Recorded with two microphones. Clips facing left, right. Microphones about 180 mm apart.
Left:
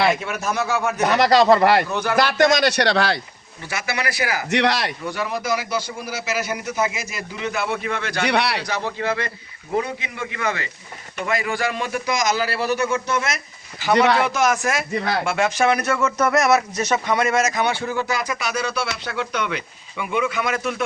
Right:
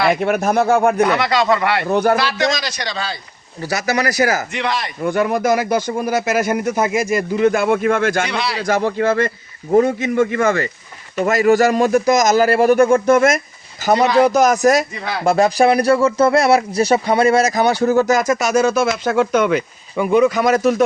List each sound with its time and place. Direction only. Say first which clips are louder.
0.1 s speech: right 7 dB; 60° right (ahead or behind)
1.1 s speech: left 2 dB; 40° left (ahead or behind)
1.9 s speech: right 9 dB; 55° right (ahead or behind)
2.1 s speech: left 2 dB; 50° left (ahead or behind); by 3.2 s 70° left (ahead or behind)
3.6 s speech: right 8 dB; 40° right (ahead or behind)
4.5 s speech: left 2 dB; 75° left (ahead or behind)
5.0 s speech: right 12 dB; 50° right (ahead or behind)
8.3 s speech: left 1 dB; 70° left (ahead or behind)
8.6 s speech: right 8 dB; 50° right (ahead or behind)
13.9 s speech: right 1 dB; 65° left (ahead or behind)
14.2 s speech: right 8 dB; 40° right (ahead or behind)